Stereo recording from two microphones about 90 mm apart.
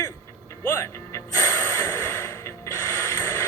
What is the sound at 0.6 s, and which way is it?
Music, 30° left (ahead or behind).